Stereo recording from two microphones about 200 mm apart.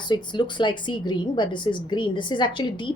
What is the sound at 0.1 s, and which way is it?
A woman's voice, 25° left (ahead or behind).